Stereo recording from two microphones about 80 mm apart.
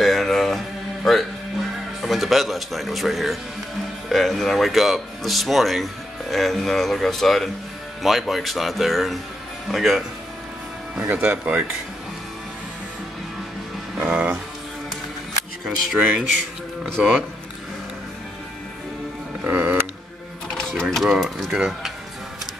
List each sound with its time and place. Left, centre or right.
0.0 s music: centre
1.0 s speech: centre
11.1 s speech: centre
13.9 s music: right
16.0 s a man's voice: centre
19.4 s music: right
20.8 s speech: centre